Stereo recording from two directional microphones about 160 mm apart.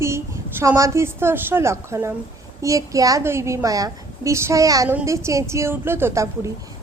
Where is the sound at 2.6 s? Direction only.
20° right (ahead or behind).